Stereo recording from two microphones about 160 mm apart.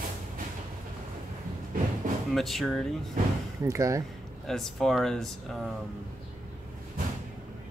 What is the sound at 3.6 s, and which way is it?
Speech, 20° right (ahead or behind).